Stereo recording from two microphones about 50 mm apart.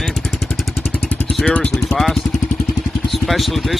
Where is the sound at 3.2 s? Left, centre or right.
Centre.